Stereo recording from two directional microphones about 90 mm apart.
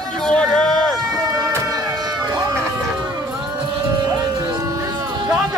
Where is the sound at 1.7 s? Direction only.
45° right (ahead or behind).